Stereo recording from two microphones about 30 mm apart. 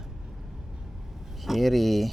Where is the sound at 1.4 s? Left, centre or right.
Centre.